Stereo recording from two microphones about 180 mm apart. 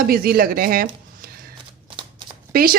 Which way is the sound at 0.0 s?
55° right (ahead or behind).